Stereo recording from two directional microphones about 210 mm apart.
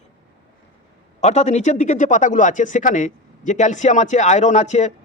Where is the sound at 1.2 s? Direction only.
30° left (ahead or behind).